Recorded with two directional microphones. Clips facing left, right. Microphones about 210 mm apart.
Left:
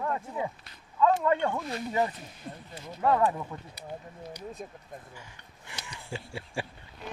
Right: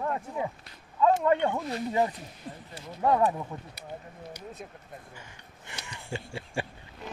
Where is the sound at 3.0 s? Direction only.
15° right (ahead or behind).